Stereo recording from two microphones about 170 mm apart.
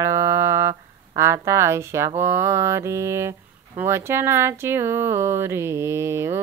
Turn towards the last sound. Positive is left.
turn(degrees=-15)  # may be behind; listen again after turning